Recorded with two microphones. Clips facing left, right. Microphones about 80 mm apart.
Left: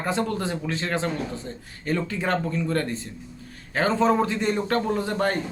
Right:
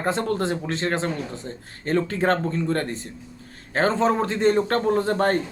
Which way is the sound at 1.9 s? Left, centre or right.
Right.